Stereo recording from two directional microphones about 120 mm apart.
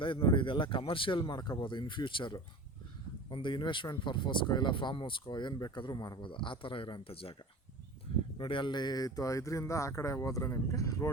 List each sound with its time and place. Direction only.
0.0 s speech: 45° left (ahead or behind)
8.4 s speech: 45° left (ahead or behind); by 11.1 s 25° left (ahead or behind)